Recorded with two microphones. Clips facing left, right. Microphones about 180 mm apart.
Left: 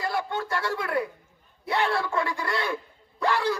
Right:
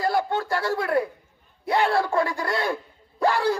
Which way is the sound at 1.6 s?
40° right (ahead or behind).